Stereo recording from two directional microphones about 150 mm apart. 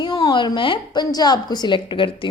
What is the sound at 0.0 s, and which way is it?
Speech, 25° left (ahead or behind).